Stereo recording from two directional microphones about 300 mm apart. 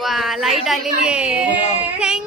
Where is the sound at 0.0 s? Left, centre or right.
Centre.